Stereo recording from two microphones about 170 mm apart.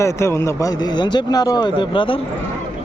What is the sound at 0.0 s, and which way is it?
A man's voice, 15° left (ahead or behind).